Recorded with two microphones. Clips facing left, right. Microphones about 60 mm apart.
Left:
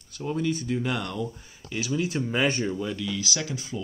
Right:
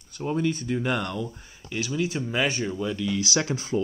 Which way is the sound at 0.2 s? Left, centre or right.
Right.